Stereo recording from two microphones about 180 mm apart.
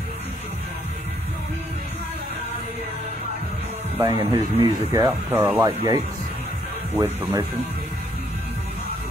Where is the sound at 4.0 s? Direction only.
20° right (ahead or behind).